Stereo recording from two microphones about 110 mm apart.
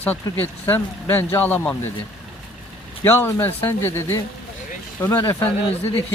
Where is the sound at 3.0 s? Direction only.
20° left (ahead or behind).